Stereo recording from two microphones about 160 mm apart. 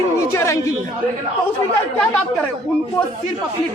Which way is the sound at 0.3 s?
20° left (ahead or behind).